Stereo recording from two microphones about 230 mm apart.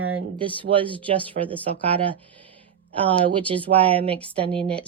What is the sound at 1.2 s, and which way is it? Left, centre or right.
Speech, centre.